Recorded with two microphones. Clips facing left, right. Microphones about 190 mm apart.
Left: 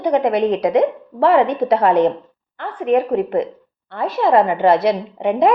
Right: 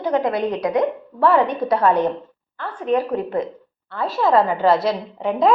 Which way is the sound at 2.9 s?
65° left (ahead or behind).